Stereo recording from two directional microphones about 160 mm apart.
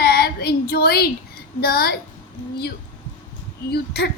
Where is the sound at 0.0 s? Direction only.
75° left (ahead or behind).